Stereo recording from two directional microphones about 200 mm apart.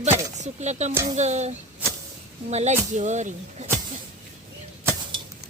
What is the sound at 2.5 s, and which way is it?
Speech, 35° right (ahead or behind).